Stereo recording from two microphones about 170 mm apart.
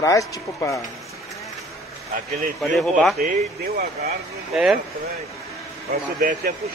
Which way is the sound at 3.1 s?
60° right (ahead or behind).